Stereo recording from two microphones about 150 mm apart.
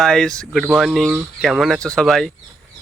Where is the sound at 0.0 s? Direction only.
5° left (ahead or behind).